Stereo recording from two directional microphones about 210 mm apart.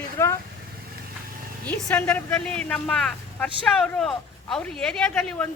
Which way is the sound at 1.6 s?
10° left (ahead or behind).